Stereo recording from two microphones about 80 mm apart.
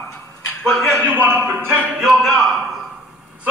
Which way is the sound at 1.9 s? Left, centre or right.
Centre.